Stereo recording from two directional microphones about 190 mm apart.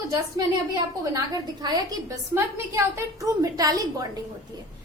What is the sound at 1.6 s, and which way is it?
A woman's voice, 20° right (ahead or behind).